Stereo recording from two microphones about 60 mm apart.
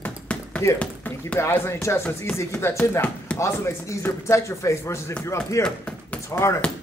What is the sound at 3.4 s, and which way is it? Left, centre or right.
Speech, left.